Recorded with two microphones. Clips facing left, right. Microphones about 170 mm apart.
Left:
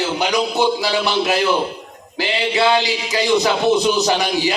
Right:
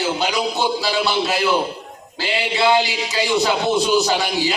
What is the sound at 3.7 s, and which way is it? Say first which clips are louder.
Speech: left 3 dB; 20° left (ahead or behind).